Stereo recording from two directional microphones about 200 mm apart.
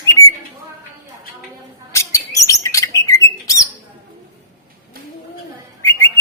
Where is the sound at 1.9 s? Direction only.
15° left (ahead or behind).